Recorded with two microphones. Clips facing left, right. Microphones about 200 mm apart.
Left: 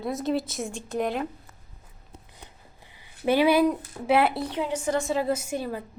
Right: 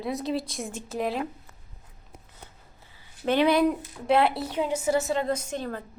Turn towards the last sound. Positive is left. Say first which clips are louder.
# left 2 dB
turn(degrees=10)  # may be behind; listen again after turning